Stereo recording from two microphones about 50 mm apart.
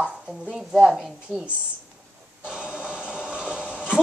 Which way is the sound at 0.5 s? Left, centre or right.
Centre.